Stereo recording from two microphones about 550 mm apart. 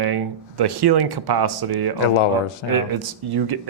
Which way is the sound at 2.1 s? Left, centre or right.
Left.